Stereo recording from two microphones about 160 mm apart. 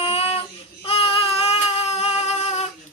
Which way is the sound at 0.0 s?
40° left (ahead or behind).